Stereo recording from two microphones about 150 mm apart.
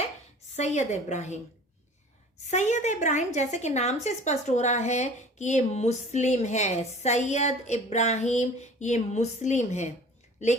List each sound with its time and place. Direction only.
0.5 s speech: 50° left (ahead or behind)
2.5 s speech: 50° left (ahead or behind)